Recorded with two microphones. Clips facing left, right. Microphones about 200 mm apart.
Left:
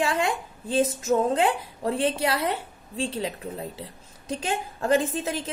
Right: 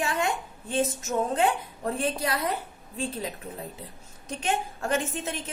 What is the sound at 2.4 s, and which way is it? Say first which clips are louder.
Speech: left 2 dB; 90° left.